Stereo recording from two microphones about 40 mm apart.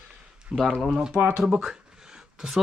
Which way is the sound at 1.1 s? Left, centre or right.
Right.